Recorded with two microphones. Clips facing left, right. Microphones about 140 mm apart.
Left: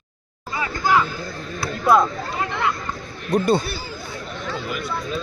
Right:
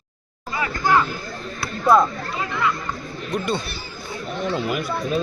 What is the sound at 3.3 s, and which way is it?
Speech, 35° left (ahead or behind).